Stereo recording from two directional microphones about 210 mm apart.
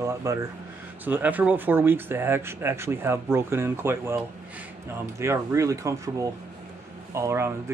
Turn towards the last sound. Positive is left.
turn(degrees=-15)  # may be behind; listen again after turning